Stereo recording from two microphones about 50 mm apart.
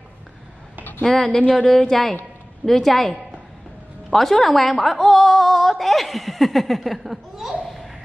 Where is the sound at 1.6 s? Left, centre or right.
Centre.